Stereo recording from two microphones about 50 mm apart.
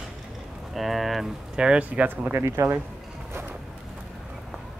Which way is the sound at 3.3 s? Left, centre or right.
Right.